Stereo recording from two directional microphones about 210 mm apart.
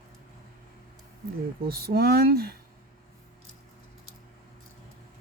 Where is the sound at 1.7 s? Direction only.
45° right (ahead or behind).